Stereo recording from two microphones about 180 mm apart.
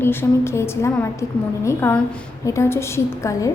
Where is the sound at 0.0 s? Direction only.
15° left (ahead or behind).